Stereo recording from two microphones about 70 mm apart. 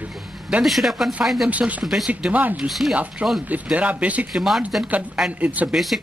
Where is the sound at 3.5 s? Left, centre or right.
Right.